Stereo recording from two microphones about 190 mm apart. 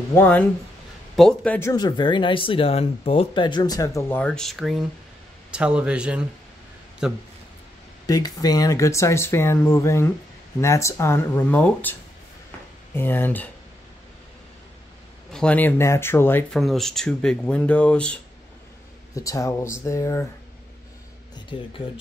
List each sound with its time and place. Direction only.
0.1 s speech: 10° left (ahead or behind)
8.1 s speech: 20° left (ahead or behind)
15.3 s speech: 5° left (ahead or behind)
19.1 s speech: 15° left (ahead or behind)
21.5 s speech: 25° left (ahead or behind)